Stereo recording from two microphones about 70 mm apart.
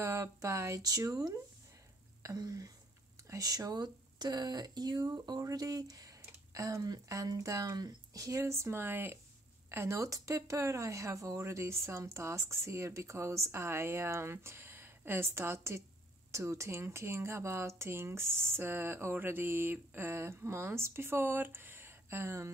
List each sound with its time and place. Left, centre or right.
0.0 s speech: right
2.3 s speech: right
9.7 s speech: right